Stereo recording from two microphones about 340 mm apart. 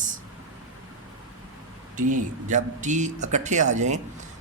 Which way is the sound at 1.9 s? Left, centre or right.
Right.